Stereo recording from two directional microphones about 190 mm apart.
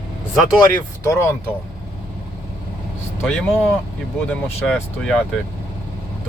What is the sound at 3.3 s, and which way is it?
Speech, centre (ahead or behind).